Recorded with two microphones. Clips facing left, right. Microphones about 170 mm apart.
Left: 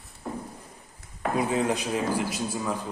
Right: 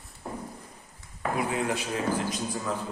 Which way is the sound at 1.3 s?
20° left (ahead or behind).